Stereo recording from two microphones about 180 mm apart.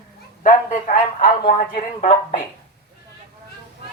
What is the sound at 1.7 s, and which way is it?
Speech, 45° left (ahead or behind).